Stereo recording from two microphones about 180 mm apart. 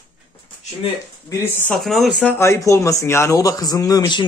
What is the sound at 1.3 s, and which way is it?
Speech, 15° left (ahead or behind).